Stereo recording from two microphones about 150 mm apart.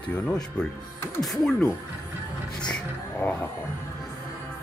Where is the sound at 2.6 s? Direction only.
5° left (ahead or behind).